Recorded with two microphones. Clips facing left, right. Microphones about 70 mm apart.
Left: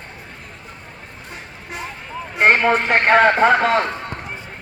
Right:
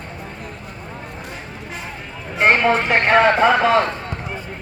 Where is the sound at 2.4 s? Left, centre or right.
Centre.